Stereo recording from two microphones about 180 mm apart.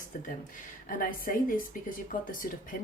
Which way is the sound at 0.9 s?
50° left (ahead or behind).